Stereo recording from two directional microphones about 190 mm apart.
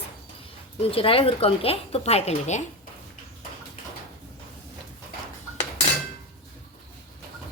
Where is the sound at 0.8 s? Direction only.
30° left (ahead or behind).